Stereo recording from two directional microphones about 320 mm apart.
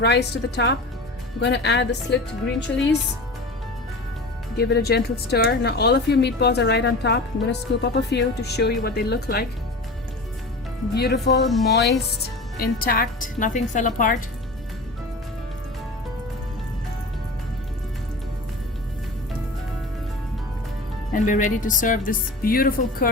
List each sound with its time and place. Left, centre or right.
0.0 s speech: left
4.5 s speech: left
10.9 s speech: left
11.4 s speech: centre
11.7 s speech: left
21.1 s speech: left